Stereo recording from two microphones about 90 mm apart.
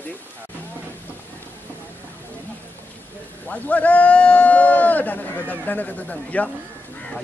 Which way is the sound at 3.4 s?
15° left (ahead or behind).